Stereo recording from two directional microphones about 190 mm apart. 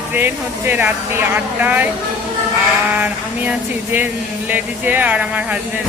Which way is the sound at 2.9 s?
10° right (ahead or behind).